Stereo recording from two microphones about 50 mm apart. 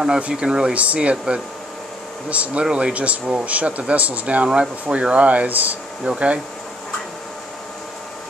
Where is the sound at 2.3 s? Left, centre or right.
Right.